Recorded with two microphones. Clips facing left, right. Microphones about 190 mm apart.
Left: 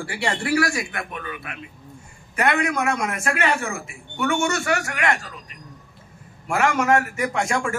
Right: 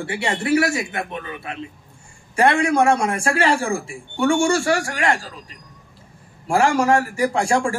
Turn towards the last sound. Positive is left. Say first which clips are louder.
# right 5 dB
turn(degrees=-30)  # may be behind; listen again after turning